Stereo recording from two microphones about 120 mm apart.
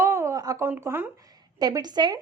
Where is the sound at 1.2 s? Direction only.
30° right (ahead or behind).